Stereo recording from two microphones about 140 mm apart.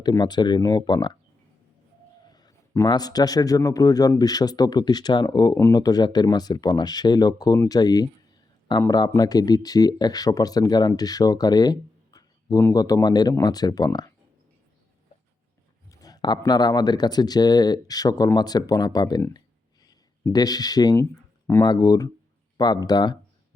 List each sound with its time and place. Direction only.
0.0 s speech: 30° left (ahead or behind)
2.3 s a man's voice: 30° left (ahead or behind)
15.9 s a man's voice: 25° left (ahead or behind)
19.8 s a sound: 25° left (ahead or behind)
21.7 s a man's voice: 30° left (ahead or behind)